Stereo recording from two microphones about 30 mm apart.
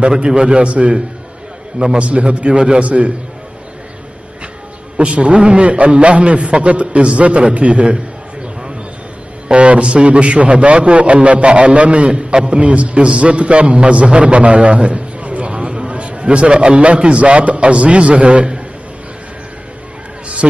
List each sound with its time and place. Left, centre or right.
0.4 s a man's voice: right
2.0 s a man's voice: right
2.4 s a man's voice: right
2.8 s a man's voice: right
4.9 s a man's voice: right
9.5 s a man's voice: right
12.1 s a man's voice: right